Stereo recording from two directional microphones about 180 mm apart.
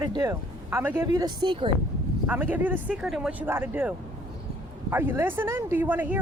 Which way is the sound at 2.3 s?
10° right (ahead or behind).